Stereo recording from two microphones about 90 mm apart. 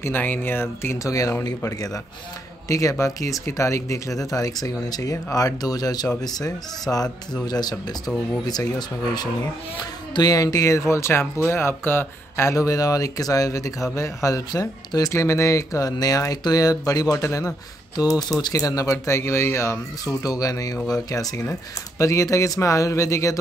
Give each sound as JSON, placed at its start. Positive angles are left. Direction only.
{"t": 0.0, "sound": "speech", "side_deg": 20}
{"t": 0.9, "sound": "speech", "side_deg": 40}
{"t": 8.7, "sound": "speech", "side_deg": 50}